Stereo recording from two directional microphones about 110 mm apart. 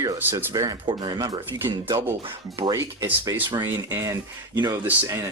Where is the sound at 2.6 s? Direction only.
35° right (ahead or behind).